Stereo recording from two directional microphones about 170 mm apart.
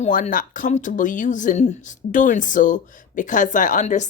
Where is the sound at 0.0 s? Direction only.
50° left (ahead or behind).